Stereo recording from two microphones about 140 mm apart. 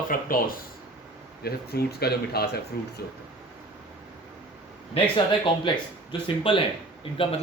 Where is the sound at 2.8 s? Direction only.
90° left.